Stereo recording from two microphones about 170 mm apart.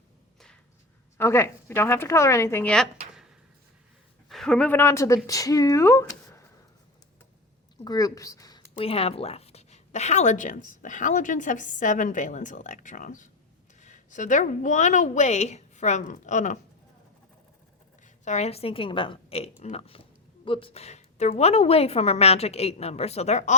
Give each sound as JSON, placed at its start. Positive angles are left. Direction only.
{"t": 0.3, "sound": "a sound", "side_deg": 5}
{"t": 1.2, "sound": "speech", "side_deg": 15}
{"t": 4.3, "sound": "speech", "side_deg": 5}
{"t": 7.9, "sound": "speech", "side_deg": 20}
{"t": 18.0, "sound": "a woman's voice", "side_deg": 40}